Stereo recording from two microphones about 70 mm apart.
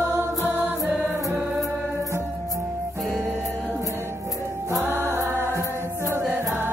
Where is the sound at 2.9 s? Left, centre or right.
Right.